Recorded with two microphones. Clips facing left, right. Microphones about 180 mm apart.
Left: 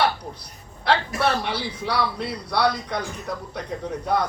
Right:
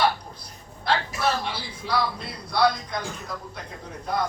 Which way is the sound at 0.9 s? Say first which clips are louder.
Left 3 dB; 60° left (ahead or behind).